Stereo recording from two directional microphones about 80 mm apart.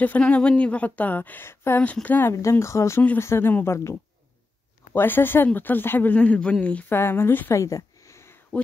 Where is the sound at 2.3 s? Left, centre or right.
Left; by 6.9 s centre.